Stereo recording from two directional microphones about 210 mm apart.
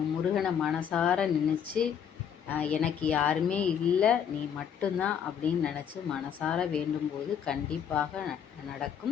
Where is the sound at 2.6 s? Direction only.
5° left (ahead or behind).